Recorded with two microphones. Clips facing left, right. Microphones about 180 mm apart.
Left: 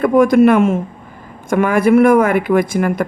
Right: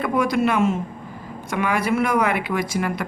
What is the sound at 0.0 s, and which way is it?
Speech, 50° left (ahead or behind).